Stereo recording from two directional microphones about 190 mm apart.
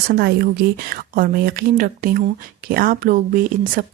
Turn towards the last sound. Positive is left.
turn(degrees=-45)  # may be behind; listen again after turning